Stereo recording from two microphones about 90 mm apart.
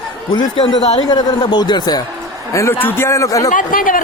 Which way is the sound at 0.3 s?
55° left (ahead or behind).